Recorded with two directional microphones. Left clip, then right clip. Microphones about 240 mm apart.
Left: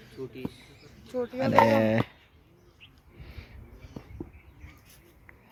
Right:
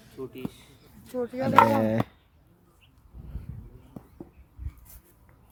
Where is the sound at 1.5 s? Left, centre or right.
Right.